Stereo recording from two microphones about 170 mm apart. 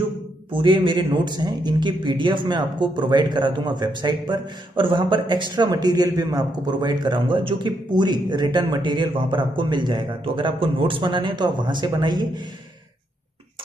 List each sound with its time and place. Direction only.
0.5 s a man's voice: 30° right (ahead or behind)